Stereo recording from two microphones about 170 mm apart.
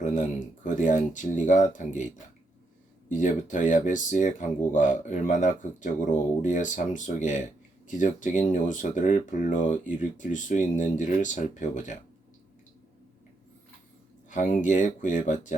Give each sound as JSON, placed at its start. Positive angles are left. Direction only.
{"t": 0.0, "sound": "speech", "side_deg": 50}
{"t": 3.1, "sound": "speech", "side_deg": 50}
{"t": 14.3, "sound": "speech", "side_deg": 50}